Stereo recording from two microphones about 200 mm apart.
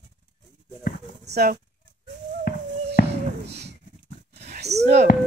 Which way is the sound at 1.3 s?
55° right (ahead or behind).